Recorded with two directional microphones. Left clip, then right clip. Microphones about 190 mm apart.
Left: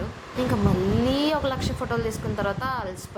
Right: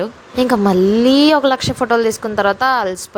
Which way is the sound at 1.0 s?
50° right (ahead or behind).